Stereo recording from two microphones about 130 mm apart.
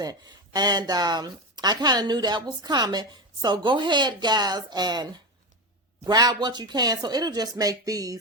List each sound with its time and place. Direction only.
0.0 s speech: 30° right (ahead or behind)